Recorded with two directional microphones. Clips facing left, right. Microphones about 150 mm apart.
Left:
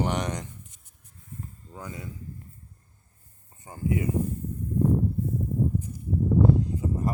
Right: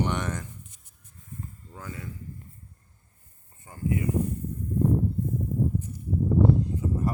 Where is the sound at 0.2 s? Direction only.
15° left (ahead or behind).